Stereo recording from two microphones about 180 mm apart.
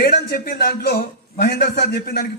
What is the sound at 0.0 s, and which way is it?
A man's voice, 60° left (ahead or behind).